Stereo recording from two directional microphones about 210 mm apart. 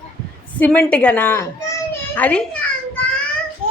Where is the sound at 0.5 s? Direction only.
10° left (ahead or behind).